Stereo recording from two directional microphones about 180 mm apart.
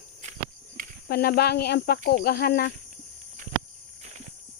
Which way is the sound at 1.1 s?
60° left (ahead or behind).